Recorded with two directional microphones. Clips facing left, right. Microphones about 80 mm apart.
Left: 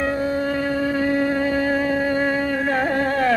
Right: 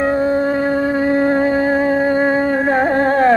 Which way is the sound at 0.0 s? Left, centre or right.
Right.